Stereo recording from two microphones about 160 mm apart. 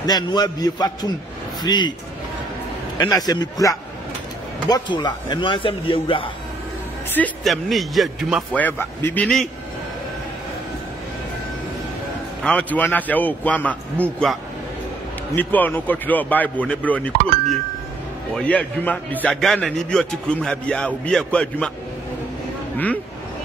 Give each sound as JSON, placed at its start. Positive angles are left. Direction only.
{"t": 0.0, "sound": "a man's voice", "side_deg": 25}
{"t": 3.0, "sound": "a man's voice", "side_deg": 25}
{"t": 7.2, "sound": "a man's voice", "side_deg": 0}
{"t": 8.5, "sound": "a man's voice", "side_deg": 10}
{"t": 12.4, "sound": "a man's voice", "side_deg": 10}